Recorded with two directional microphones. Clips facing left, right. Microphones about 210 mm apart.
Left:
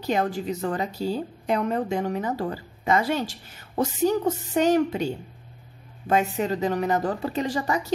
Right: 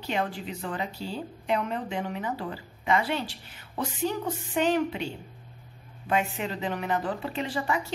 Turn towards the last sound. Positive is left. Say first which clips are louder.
# left 4 dB
turn(degrees=40)  # may be behind; listen again after turning